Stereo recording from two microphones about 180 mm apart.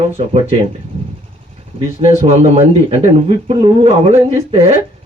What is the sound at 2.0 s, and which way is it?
Speech, 35° right (ahead or behind).